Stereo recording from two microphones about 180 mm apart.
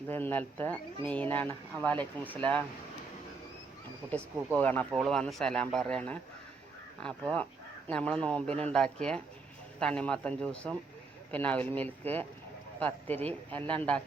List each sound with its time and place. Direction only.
0.1 s speech: 10° left (ahead or behind)
4.5 s speech: 10° left (ahead or behind)